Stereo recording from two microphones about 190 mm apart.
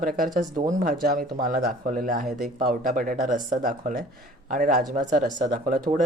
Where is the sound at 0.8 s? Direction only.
50° right (ahead or behind).